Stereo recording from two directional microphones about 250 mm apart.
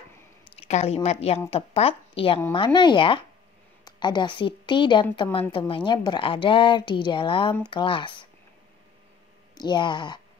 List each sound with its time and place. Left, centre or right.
0.6 s a woman's voice: left
9.6 s speech: centre